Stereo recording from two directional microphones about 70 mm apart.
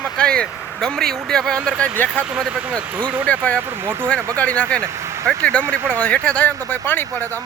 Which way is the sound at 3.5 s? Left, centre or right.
Right.